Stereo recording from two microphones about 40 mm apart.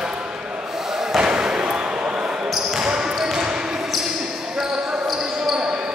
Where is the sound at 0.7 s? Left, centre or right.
Centre.